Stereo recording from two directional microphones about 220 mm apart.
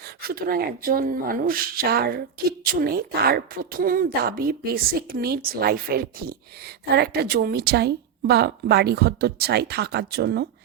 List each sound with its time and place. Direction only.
0.2 s speech: 45° right (ahead or behind)